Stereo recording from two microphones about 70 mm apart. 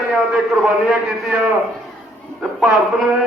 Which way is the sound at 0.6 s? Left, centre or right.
Centre.